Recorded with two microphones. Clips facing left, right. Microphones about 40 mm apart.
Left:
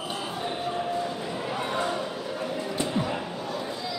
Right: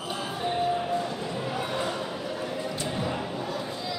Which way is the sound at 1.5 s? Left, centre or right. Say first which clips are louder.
Left 3 dB; centre.